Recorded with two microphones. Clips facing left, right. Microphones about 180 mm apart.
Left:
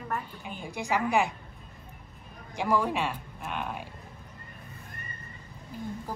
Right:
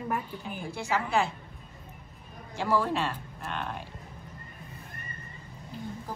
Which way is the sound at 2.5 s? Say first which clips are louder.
Even; 15° left (ahead or behind).